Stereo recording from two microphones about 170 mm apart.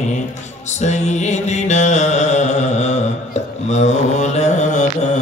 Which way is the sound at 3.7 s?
40° left (ahead or behind).